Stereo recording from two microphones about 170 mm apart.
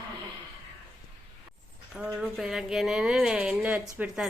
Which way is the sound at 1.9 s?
5° right (ahead or behind).